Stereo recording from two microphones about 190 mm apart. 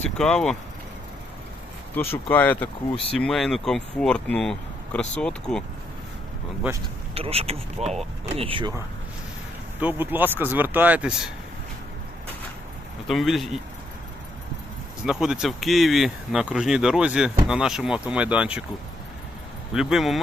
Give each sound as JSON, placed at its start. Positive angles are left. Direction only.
{"t": 0.2, "sound": "speech", "side_deg": 5}
{"t": 2.3, "sound": "speech", "side_deg": 10}
{"t": 6.6, "sound": "speech", "side_deg": -10}
{"t": 7.1, "sound": "speech", "side_deg": -30}
{"t": 9.8, "sound": "speech", "side_deg": -10}
{"t": 13.1, "sound": "speech", "side_deg": 0}
{"t": 15.0, "sound": "speech", "side_deg": -5}
{"t": 19.7, "sound": "speech", "side_deg": 0}